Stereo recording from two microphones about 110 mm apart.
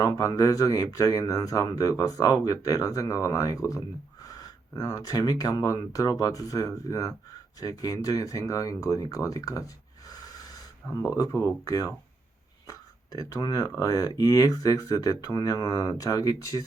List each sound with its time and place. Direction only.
0.0 s speech: 30° left (ahead or behind)
13.1 s speech: 30° left (ahead or behind)